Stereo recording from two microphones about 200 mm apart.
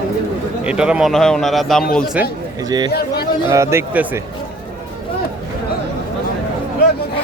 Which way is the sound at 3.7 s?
10° right (ahead or behind).